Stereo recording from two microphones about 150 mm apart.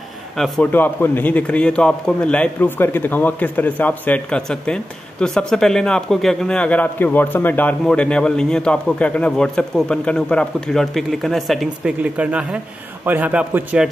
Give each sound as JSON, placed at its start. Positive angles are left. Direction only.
{"t": 0.4, "sound": "a man's voice", "side_deg": 10}